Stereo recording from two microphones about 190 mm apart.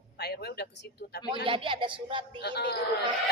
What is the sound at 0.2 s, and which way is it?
Speech, 60° left (ahead or behind).